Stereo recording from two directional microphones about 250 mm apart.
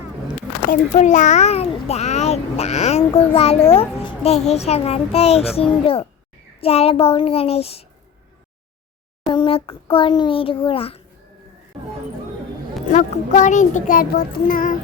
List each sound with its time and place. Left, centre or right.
0.7 s a child's voice: left
9.3 s a child's voice: left
12.9 s a child's voice: left